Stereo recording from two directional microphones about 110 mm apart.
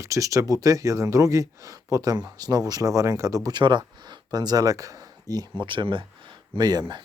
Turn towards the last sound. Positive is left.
turn(degrees=-40)  # may be behind; listen again after turning